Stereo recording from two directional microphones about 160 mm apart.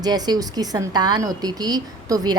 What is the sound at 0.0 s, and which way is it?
Speech, 25° right (ahead or behind).